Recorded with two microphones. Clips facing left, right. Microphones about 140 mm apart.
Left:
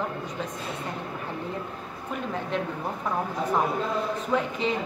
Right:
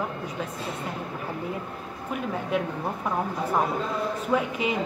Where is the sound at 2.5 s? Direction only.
10° right (ahead or behind).